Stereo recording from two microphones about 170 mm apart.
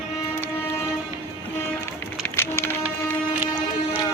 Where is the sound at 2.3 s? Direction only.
15° left (ahead or behind).